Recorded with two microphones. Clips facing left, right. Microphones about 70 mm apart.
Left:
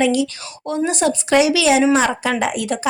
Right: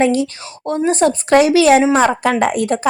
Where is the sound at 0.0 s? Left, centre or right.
Right.